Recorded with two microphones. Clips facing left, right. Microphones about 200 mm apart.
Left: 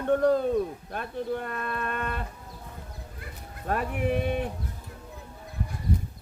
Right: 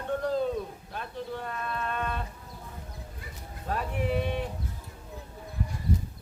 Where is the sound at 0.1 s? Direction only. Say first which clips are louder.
Left 6 dB; 55° left (ahead or behind).